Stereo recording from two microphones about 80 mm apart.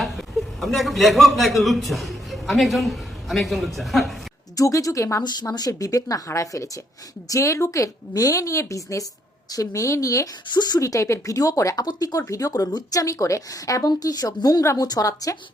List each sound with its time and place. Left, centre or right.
0.0 s a man's voice: centre
4.5 s a woman's voice: left
5.2 s a woman's voice: left
10.5 s speech: left
10.8 s a woman's voice: left